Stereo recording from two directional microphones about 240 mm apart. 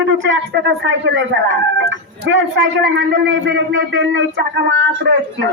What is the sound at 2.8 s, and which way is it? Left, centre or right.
Speech, right.